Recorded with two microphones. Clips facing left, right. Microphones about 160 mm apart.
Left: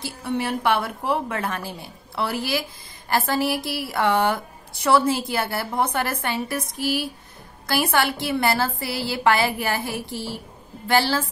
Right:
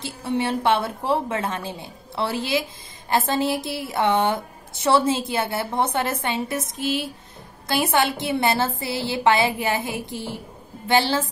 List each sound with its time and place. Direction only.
0.0 s a woman's voice: 25° right (ahead or behind)